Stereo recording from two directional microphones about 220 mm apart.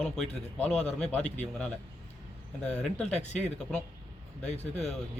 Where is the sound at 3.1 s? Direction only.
30° left (ahead or behind).